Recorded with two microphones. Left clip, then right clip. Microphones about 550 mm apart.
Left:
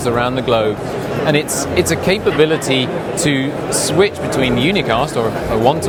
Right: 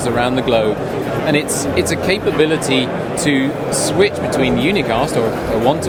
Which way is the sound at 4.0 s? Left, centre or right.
Left.